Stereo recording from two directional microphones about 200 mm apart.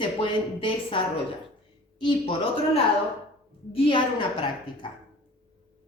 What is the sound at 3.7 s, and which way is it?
A woman's voice, 30° left (ahead or behind).